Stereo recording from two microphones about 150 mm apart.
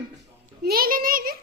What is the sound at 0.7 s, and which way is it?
Speech, 75° right (ahead or behind).